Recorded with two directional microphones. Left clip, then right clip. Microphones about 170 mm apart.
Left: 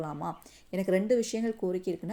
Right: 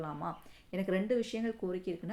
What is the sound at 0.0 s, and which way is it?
Speech, 45° left (ahead or behind).